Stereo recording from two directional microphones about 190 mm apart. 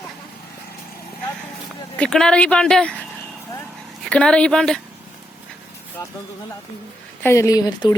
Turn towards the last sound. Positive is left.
turn(degrees=20)  # may be behind; listen again after turning